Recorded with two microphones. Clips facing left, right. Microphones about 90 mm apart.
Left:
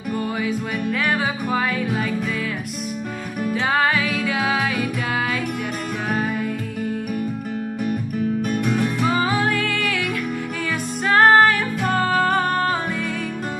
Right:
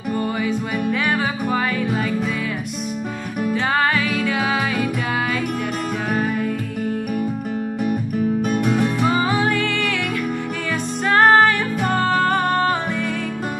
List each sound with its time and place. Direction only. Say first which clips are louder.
0.5 s music: right 2 dB; centre (ahead or behind)
3.4 s music: even; centre (ahead or behind)
8.5 s music: right 2 dB; 20° right (ahead or behind)
9.0 s music: right 1 dB; centre (ahead or behind)